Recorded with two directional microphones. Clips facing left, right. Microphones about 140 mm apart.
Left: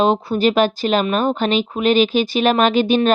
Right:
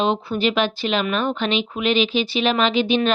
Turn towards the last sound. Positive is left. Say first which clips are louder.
# left 4 dB
turn(degrees=45)  # may be behind; listen again after turning